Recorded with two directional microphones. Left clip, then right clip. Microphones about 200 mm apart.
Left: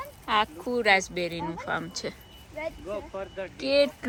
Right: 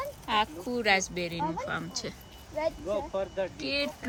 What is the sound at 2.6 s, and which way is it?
Speech, 50° right (ahead or behind).